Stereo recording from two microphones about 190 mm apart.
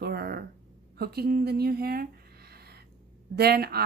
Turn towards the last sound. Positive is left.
turn(degrees=-55)  # may be behind; listen again after turning